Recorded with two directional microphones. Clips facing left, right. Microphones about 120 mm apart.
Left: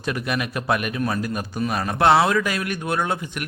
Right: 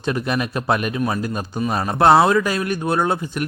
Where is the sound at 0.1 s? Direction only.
30° right (ahead or behind).